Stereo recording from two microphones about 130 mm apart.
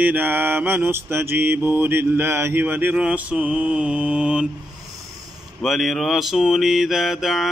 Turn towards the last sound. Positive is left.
turn(degrees=0)  # may be behind; listen again after turning